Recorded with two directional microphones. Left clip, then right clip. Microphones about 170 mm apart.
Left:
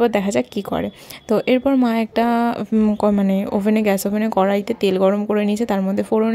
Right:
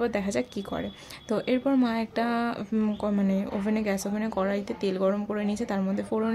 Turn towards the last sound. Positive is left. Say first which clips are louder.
# left 10 dB
turn(degrees=40)  # may be behind; listen again after turning